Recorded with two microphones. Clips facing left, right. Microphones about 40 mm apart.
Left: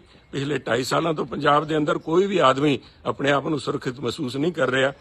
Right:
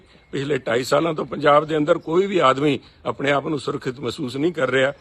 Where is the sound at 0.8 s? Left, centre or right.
Right.